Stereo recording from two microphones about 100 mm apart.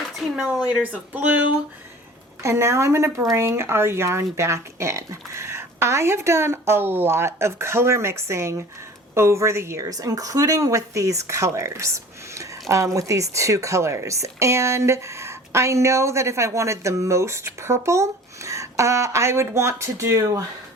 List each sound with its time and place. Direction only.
0.2 s speech: 5° right (ahead or behind)
2.4 s a woman's voice: 30° right (ahead or behind)